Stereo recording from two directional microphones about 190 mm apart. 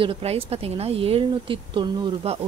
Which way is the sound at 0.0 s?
30° right (ahead or behind).